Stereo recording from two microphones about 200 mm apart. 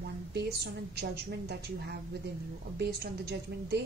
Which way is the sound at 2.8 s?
55° right (ahead or behind).